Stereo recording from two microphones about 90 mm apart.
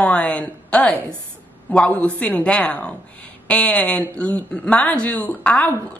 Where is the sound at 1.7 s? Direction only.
15° left (ahead or behind).